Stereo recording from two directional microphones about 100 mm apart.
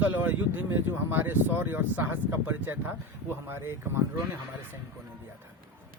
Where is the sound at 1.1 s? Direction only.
20° right (ahead or behind).